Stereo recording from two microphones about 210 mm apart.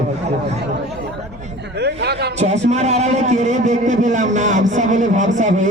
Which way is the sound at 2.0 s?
50° right (ahead or behind).